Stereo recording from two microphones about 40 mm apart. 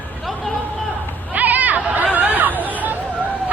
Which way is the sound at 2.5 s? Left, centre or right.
Left.